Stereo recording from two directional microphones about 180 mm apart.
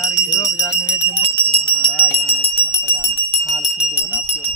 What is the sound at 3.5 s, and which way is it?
Jingle bell, 5° right (ahead or behind).